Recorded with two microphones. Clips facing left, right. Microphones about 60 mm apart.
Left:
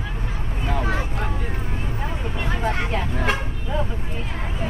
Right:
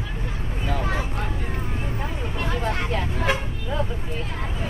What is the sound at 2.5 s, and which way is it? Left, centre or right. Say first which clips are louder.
Vehicle: left 2 dB; centre.